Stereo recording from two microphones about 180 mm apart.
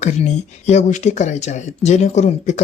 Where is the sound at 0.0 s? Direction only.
40° left (ahead or behind).